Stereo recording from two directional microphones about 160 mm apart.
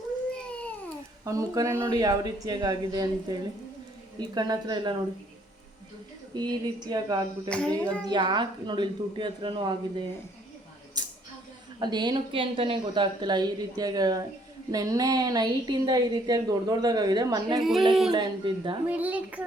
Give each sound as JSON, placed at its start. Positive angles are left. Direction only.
{"t": 0.3, "sound": "baby cry", "side_deg": 5}
{"t": 1.2, "sound": "a woman's voice", "side_deg": -20}
{"t": 6.3, "sound": "a woman's voice", "side_deg": -25}
{"t": 7.4, "sound": "child singing", "side_deg": 5}
{"t": 8.0, "sound": "a woman's voice", "side_deg": -30}
{"t": 11.8, "sound": "a woman's voice", "side_deg": -25}
{"t": 17.6, "sound": "speech", "side_deg": 0}
{"t": 18.1, "sound": "a woman's voice", "side_deg": -30}
{"t": 18.9, "sound": "a woman's voice", "side_deg": -10}